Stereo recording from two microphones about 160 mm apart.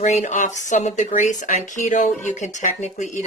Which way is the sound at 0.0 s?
45° left (ahead or behind).